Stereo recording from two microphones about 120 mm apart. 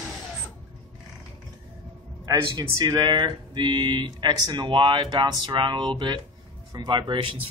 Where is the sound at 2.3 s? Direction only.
35° right (ahead or behind).